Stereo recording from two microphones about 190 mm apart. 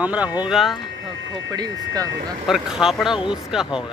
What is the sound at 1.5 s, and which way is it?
Speech, 20° right (ahead or behind).